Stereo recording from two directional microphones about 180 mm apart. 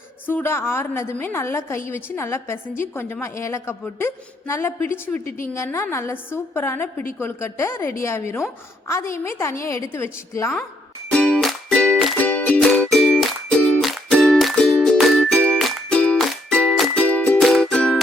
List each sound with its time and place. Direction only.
0.3 s a woman's voice: 10° left (ahead or behind)
11.1 s music: 5° left (ahead or behind)